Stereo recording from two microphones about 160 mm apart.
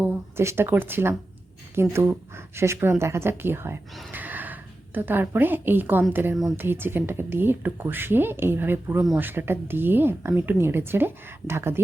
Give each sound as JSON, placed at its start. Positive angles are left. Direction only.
{"t": 0.0, "sound": "speech", "side_deg": -15}
{"t": 4.1, "sound": "neigh", "side_deg": -10}
{"t": 4.9, "sound": "speech", "side_deg": -10}